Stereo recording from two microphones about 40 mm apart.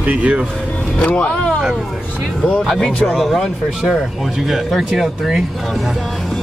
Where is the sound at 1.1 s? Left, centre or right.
Left.